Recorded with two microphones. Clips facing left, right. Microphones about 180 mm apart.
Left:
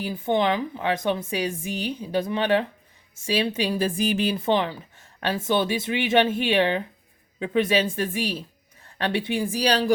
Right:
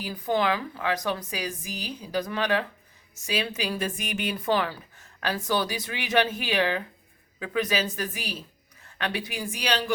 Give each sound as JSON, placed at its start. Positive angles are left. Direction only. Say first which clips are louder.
{"t": 0.0, "sound": "a woman's voice", "louder": "left 3 dB", "side_deg": 25}